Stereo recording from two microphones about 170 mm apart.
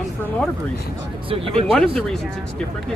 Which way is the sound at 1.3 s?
35° right (ahead or behind).